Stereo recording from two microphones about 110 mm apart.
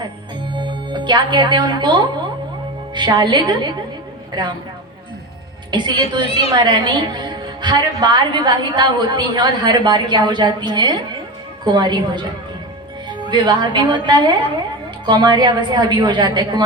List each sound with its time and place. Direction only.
0.5 s a woman's voice: 45° right (ahead or behind)
5.7 s a woman's voice: 45° right (ahead or behind)